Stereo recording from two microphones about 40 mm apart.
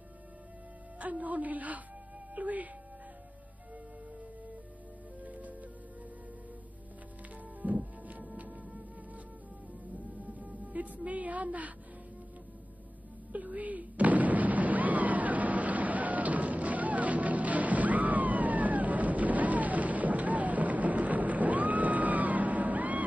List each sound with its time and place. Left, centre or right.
0.9 s speech: right
5.2 s music: right
7.6 s music: right
9.9 s music: right
13.3 s explosion: right